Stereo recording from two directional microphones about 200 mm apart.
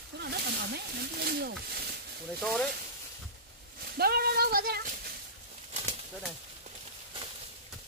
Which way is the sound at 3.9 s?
50° right (ahead or behind).